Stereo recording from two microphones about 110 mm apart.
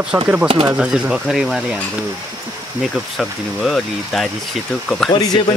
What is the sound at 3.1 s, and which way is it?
Speech, 5° left (ahead or behind).